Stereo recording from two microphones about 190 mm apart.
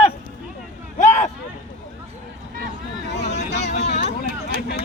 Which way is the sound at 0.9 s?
40° left (ahead or behind).